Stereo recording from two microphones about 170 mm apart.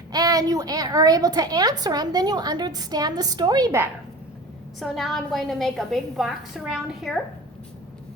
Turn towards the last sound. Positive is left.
turn(degrees=0)  # may be behind; listen again after turning